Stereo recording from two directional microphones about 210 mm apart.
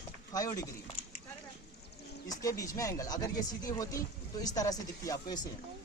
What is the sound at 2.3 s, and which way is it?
Speech, 15° left (ahead or behind).